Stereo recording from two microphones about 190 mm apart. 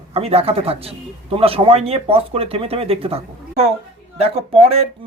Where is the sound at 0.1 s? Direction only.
30° right (ahead or behind).